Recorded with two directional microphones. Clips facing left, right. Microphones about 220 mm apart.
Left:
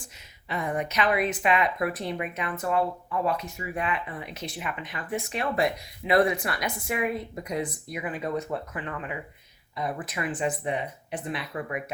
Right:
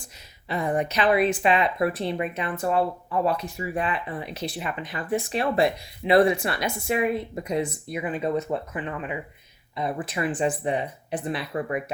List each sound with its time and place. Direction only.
0.0 s speech: 35° right (ahead or behind)